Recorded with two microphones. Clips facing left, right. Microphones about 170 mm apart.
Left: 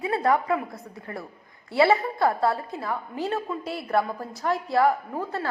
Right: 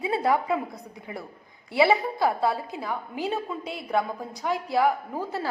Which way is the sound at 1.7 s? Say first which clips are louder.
Left 1 dB; centre (ahead or behind).